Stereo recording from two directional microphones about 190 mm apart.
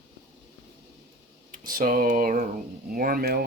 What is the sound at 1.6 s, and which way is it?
Speech, 45° right (ahead or behind).